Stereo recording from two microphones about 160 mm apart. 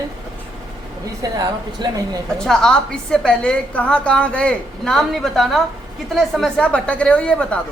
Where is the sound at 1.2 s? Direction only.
25° right (ahead or behind).